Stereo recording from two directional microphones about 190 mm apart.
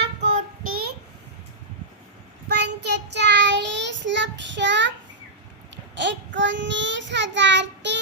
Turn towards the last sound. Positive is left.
turn(degrees=-65)  # may be behind; listen again after turning